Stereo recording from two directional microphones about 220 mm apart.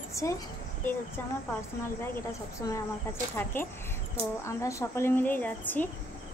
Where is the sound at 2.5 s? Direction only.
15° left (ahead or behind).